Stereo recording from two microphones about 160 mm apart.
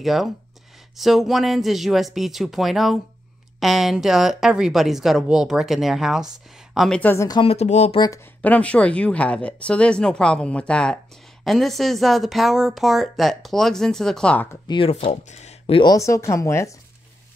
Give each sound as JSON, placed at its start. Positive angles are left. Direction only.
{"t": 0.0, "sound": "speech", "side_deg": 0}
{"t": 7.0, "sound": "speech", "side_deg": 10}
{"t": 7.2, "sound": "speech", "side_deg": 30}
{"t": 7.5, "sound": "speech", "side_deg": 45}
{"t": 8.4, "sound": "speech", "side_deg": 10}
{"t": 14.7, "sound": "speech", "side_deg": 35}